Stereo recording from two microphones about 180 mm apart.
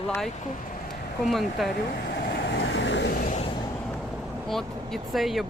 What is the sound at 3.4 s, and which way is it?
Vehicle, 30° left (ahead or behind).